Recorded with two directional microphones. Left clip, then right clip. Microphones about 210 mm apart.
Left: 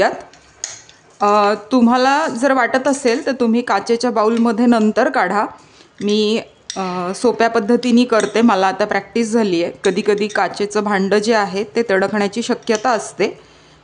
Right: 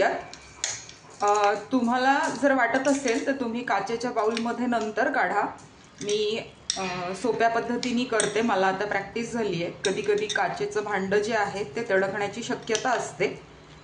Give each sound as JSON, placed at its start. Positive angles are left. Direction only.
{"t": 1.2, "sound": "a woman's voice", "side_deg": 55}